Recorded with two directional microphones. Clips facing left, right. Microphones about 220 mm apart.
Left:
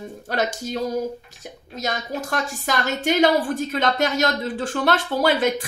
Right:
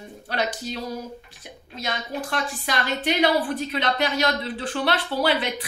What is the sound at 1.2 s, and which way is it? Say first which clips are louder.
A woman's voice: left 4 dB; 45° left (ahead or behind).